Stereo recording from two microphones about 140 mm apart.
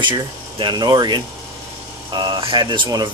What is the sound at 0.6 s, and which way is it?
Speech, 30° right (ahead or behind).